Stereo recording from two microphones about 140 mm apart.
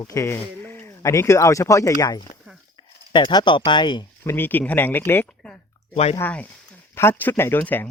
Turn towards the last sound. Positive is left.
turn(degrees=15)  # may be behind; listen again after turning